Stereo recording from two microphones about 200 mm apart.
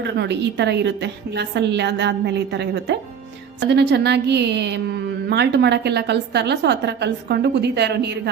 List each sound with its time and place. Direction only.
0.0 s a woman's voice: 60° right (ahead or behind)